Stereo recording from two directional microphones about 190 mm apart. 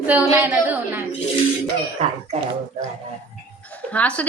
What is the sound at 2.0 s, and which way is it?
Speech, 30° right (ahead or behind).